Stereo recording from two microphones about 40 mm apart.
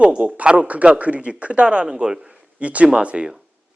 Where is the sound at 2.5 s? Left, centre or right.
Right.